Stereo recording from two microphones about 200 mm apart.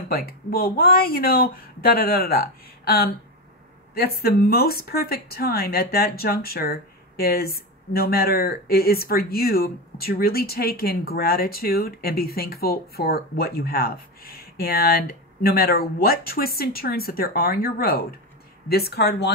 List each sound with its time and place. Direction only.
0.1 s speech: 50° left (ahead or behind)